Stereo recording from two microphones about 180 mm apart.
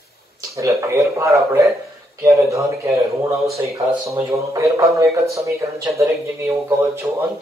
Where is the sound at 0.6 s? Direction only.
15° right (ahead or behind).